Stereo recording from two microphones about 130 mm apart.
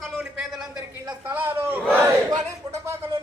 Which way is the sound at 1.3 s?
20° right (ahead or behind).